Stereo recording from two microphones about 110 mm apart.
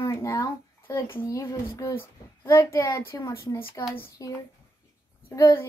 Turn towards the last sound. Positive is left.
turn(degrees=25)  # may be behind; listen again after turning